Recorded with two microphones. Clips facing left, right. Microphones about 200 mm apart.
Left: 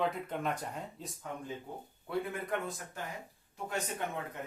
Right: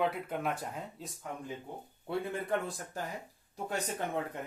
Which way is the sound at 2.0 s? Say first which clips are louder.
Right 2 dB; 30° right (ahead or behind).